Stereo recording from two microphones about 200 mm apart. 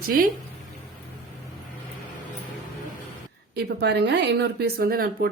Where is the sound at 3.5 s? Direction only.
55° right (ahead or behind).